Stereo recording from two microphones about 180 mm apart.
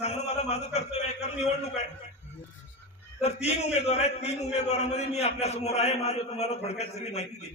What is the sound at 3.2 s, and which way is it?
A man's voice, 35° left (ahead or behind).